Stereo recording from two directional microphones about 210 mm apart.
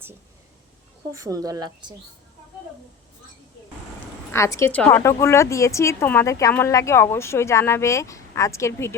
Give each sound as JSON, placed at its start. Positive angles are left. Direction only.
{"t": 1.1, "sound": "speech", "side_deg": -15}
{"t": 4.3, "sound": "a woman's voice", "side_deg": 15}